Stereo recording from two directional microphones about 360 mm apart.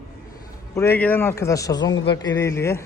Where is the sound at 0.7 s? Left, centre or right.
Centre.